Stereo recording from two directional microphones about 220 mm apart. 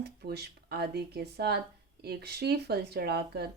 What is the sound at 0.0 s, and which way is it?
Speech, 45° right (ahead or behind).